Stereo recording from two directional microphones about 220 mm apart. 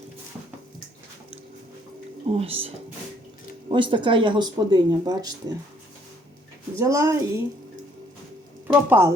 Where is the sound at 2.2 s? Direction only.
25° right (ahead or behind).